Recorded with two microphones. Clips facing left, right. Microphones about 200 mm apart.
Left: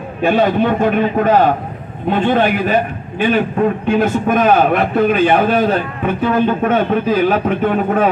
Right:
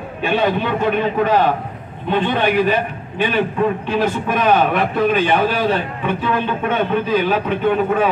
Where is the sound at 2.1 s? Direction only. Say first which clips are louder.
Left 2 dB; 45° left (ahead or behind).